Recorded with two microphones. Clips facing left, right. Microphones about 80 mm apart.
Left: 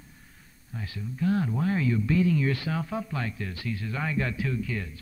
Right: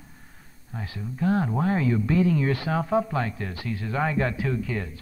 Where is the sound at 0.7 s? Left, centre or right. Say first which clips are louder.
Right 2 dB; right.